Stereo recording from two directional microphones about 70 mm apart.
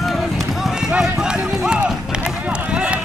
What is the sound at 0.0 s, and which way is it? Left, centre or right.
Run, centre.